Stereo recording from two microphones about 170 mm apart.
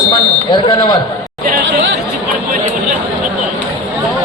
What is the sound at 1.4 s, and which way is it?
Chatter, 55° right (ahead or behind).